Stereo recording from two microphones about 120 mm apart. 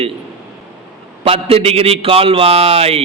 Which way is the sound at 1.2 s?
55° right (ahead or behind).